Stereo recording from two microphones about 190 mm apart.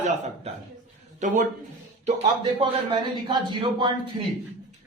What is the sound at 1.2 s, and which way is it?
Speech, 45° right (ahead or behind).